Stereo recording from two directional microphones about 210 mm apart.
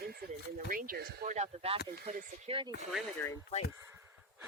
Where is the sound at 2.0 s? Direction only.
40° right (ahead or behind).